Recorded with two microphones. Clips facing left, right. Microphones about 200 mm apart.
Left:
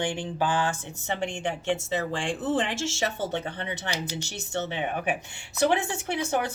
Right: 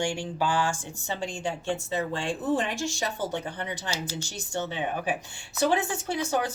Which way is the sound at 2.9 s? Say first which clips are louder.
Left 2 dB; 25° left (ahead or behind).